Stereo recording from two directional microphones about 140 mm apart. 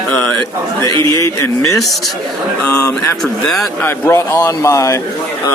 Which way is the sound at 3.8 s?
20° left (ahead or behind).